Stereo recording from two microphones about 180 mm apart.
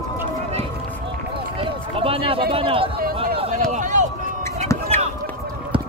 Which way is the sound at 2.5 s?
30° right (ahead or behind).